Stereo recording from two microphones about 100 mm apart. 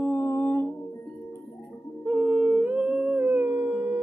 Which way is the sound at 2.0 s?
5° right (ahead or behind).